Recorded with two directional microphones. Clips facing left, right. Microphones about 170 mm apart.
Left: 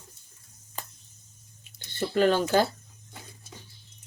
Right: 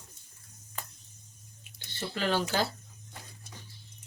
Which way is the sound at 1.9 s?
50° left (ahead or behind).